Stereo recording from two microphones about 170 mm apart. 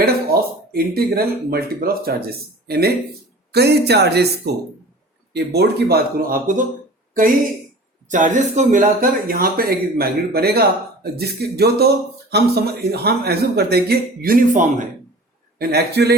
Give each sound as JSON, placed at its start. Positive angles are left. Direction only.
{"t": 0.0, "sound": "speech", "side_deg": -65}
{"t": 5.5, "sound": "speech", "side_deg": -65}
{"t": 8.1, "sound": "speech", "side_deg": -50}
{"t": 15.5, "sound": "speech", "side_deg": -70}